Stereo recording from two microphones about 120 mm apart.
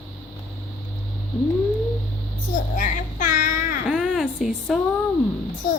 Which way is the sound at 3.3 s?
90° left.